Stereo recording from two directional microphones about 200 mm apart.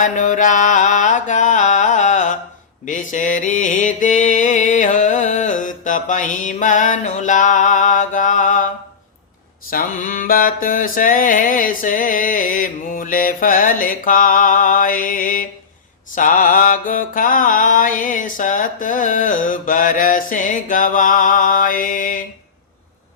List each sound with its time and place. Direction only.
0.0 s mantra: 40° left (ahead or behind)
9.6 s mantra: 45° left (ahead or behind)